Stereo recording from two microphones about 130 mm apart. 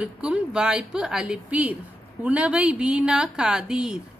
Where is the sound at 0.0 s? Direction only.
5° right (ahead or behind).